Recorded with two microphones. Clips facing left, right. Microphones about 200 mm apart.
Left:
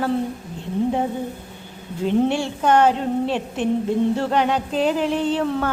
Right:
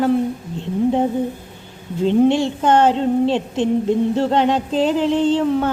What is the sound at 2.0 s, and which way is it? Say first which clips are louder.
A woman's voice: right 5 dB; 20° right (ahead or behind).